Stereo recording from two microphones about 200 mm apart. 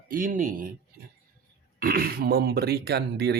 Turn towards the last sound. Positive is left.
turn(degrees=-55)  # may be behind; listen again after turning